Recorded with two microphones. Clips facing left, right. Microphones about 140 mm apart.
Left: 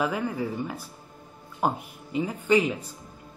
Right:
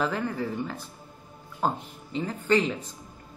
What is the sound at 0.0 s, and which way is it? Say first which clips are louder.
Speech: left 1 dB; 10° left (ahead or behind).